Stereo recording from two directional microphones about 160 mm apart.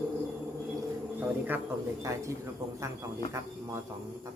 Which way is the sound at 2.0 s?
20° right (ahead or behind).